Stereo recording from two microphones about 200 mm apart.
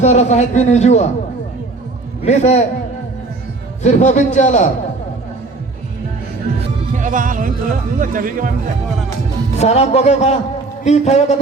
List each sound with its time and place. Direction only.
0.0 s speech: 35° left (ahead or behind)
2.2 s speech: 35° left (ahead or behind)
3.8 s speech: 35° left (ahead or behind)
6.9 s speech: 40° right (ahead or behind)
9.6 s speech: 35° left (ahead or behind)